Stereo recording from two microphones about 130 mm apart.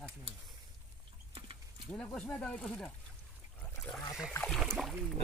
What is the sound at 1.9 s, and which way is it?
Speech, 5° left (ahead or behind).